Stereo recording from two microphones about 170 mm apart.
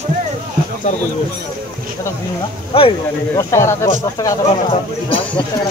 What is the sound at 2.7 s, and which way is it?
Speech, 35° left (ahead or behind).